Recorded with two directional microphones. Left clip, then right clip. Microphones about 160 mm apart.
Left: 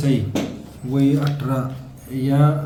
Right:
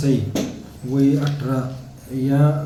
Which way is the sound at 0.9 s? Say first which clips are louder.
Right 1 dB; 10° left (ahead or behind).